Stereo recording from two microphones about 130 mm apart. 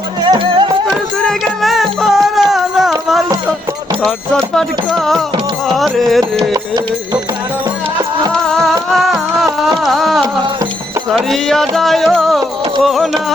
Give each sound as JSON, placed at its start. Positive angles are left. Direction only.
{"t": 0.2, "sound": "music", "side_deg": -35}
{"t": 0.9, "sound": "music", "side_deg": 0}
{"t": 4.0, "sound": "music", "side_deg": 5}
{"t": 6.5, "sound": "music", "side_deg": -30}
{"t": 8.3, "sound": "music", "side_deg": 5}